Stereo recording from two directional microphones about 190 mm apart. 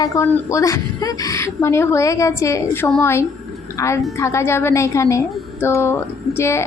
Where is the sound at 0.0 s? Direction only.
15° left (ahead or behind).